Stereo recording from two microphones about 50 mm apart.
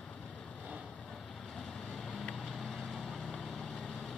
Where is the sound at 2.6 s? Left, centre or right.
Centre.